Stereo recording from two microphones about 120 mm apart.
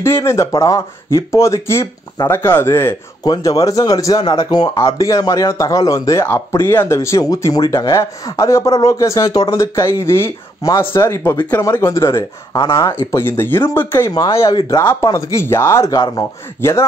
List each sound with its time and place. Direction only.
0.0 s speech: 20° left (ahead or behind)
14.1 s speech: 30° left (ahead or behind)